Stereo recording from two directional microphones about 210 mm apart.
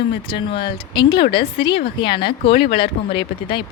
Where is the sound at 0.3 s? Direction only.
25° left (ahead or behind).